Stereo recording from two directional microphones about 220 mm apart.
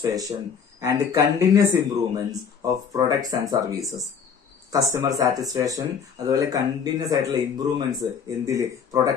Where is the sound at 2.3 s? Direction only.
15° right (ahead or behind).